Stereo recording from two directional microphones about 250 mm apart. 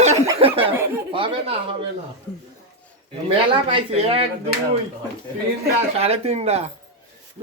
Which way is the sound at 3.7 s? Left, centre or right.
Right.